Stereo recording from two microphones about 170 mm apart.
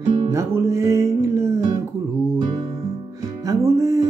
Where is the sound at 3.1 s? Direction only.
20° right (ahead or behind).